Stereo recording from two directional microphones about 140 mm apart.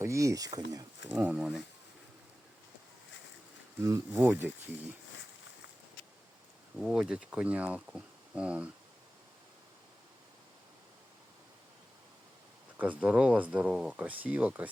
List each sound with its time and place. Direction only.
0.0 s speech: 20° right (ahead or behind)
1.1 s speech: 10° right (ahead or behind)
3.8 s speech: 20° right (ahead or behind)
6.7 s speech: 5° right (ahead or behind)
12.8 s speech: 10° right (ahead or behind)